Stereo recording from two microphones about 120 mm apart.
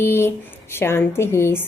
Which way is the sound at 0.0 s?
20° left (ahead or behind).